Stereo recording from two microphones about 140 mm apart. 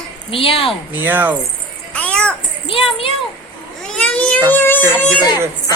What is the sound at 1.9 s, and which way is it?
Children playing, 10° left (ahead or behind).